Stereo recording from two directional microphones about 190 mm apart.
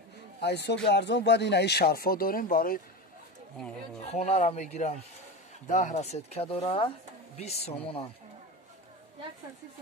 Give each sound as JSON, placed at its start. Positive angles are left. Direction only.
{"t": 0.4, "sound": "speech", "side_deg": 60}
{"t": 4.1, "sound": "speech", "side_deg": 35}